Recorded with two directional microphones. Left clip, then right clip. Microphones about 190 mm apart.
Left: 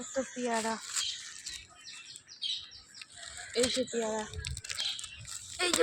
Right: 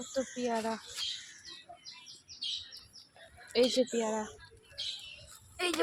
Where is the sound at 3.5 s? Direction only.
40° right (ahead or behind).